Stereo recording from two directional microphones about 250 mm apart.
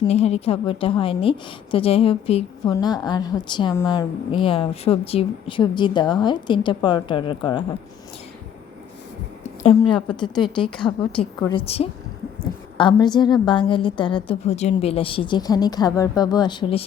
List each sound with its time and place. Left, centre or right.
0.0 s a woman's voice: left
9.6 s a woman's voice: centre